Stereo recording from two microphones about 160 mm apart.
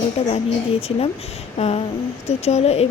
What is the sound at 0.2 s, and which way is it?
Speech, 40° left (ahead or behind).